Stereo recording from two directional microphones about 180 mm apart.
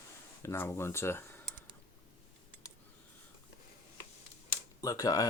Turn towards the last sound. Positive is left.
turn(degrees=20)  # may be behind; listen again after turning